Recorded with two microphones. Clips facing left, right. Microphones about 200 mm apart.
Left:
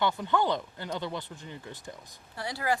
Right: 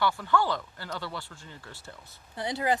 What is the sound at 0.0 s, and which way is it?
Speech, 20° left (ahead or behind).